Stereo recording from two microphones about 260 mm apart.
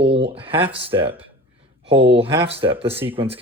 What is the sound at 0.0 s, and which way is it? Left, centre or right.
Speech, right.